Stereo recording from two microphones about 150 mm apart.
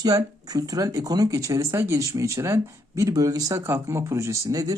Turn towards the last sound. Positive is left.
turn(degrees=-25)  # may be behind; listen again after turning